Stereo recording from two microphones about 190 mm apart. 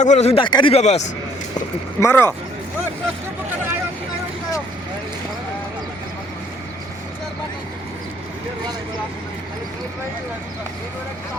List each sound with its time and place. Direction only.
0.0 s speech: 35° left (ahead or behind)
2.0 s speech: 15° left (ahead or behind)